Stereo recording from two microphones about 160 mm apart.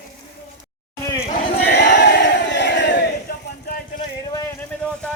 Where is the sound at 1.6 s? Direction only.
90° left.